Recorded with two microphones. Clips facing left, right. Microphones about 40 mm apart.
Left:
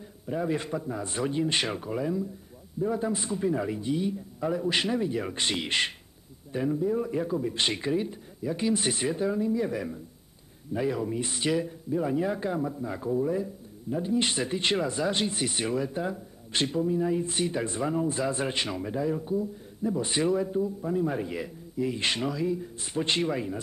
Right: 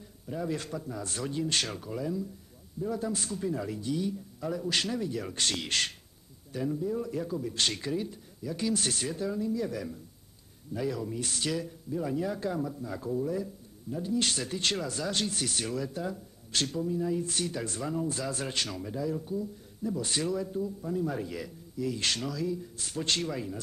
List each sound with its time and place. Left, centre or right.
0.3 s speech: left